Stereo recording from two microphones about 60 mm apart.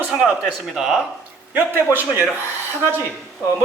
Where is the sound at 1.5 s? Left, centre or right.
Right.